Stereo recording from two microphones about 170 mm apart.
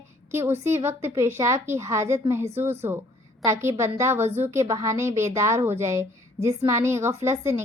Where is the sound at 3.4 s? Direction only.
15° right (ahead or behind).